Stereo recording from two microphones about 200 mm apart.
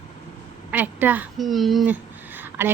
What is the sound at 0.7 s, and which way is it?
A woman's voice, 10° right (ahead or behind).